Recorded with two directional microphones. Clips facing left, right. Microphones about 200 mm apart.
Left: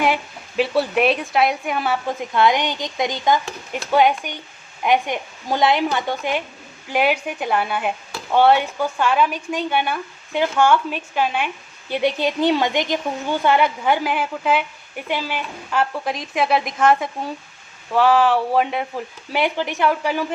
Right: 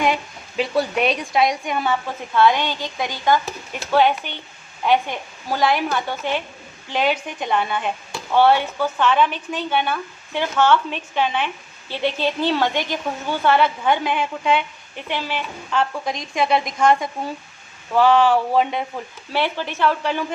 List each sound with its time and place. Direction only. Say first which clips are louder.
0.0 s speech: left 1 dB; 5° left (ahead or behind)
2.3 s speech: right 1 dB; 15° left (ahead or behind)